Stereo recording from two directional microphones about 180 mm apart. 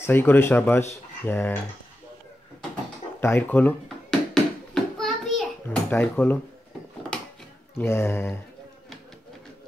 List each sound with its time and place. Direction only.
0.0 s speech: 10° left (ahead or behind)
3.2 s speech: 10° left (ahead or behind)
4.3 s a sound: centre (ahead or behind)
7.7 s speech: 15° left (ahead or behind)